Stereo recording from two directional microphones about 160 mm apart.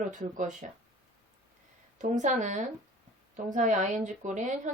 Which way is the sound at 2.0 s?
50° right (ahead or behind).